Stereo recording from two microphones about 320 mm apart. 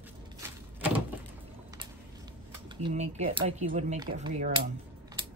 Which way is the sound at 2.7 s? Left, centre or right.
Centre.